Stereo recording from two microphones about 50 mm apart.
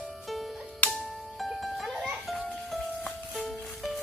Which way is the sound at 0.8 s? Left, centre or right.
Left.